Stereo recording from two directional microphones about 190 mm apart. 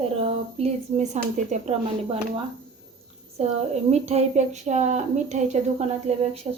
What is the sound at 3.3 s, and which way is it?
Speech, 35° right (ahead or behind).